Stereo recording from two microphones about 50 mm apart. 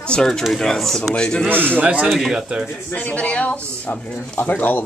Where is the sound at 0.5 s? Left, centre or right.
Centre.